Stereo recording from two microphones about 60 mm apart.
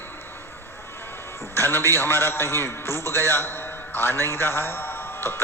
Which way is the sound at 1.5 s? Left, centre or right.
Left.